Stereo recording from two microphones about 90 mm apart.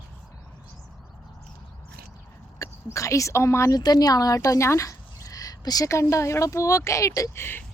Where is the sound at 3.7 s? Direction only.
50° left (ahead or behind); by 7.6 s 25° left (ahead or behind).